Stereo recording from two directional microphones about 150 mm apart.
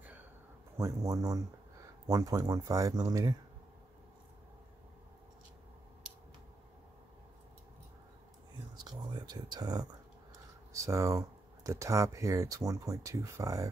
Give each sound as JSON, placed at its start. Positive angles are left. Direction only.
{"t": 0.7, "sound": "speech", "side_deg": -20}
{"t": 8.7, "sound": "a sound", "side_deg": -25}
{"t": 10.7, "sound": "speech", "side_deg": -20}